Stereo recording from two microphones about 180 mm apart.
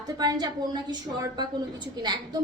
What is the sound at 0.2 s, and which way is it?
A woman's voice, 25° right (ahead or behind).